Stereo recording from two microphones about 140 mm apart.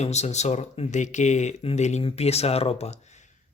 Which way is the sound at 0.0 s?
55° left (ahead or behind).